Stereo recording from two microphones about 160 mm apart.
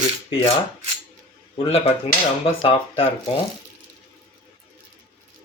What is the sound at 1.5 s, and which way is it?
Rub, 35° left (ahead or behind).